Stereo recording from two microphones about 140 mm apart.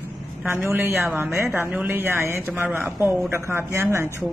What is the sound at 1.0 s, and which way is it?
Speech, 15° right (ahead or behind).